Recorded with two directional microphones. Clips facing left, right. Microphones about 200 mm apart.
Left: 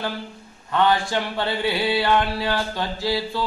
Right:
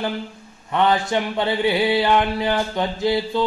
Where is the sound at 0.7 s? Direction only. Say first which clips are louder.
Right 1 dB; 20° right (ahead or behind).